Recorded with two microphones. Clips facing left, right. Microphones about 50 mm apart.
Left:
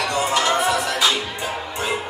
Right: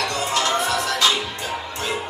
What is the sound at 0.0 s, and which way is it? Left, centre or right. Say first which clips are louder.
Music: left 2 dB; centre.